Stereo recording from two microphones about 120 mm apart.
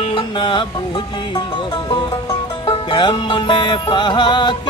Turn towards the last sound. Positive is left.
turn(degrees=40)  # may be behind; listen again after turning